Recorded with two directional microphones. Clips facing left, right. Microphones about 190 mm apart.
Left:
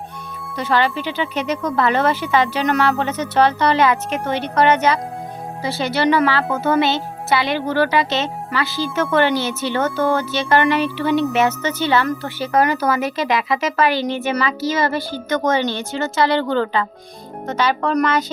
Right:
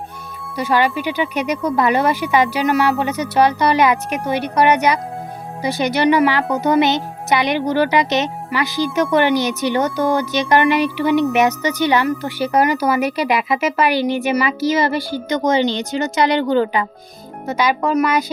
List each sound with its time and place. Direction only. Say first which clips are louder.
0.5 s speech: right 2 dB; 15° right (ahead or behind)